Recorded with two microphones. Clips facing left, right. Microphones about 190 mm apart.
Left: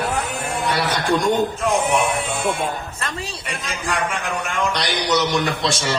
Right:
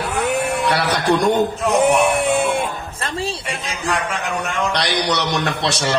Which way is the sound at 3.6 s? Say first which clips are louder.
Right 2 dB; centre (ahead or behind).